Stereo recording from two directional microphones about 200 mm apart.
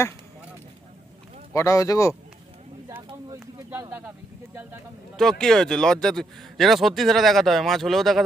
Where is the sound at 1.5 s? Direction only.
15° left (ahead or behind).